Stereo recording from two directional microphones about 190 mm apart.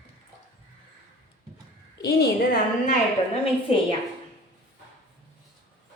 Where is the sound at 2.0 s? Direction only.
60° left (ahead or behind).